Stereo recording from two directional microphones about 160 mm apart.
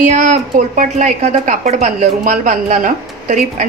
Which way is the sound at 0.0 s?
55° right (ahead or behind).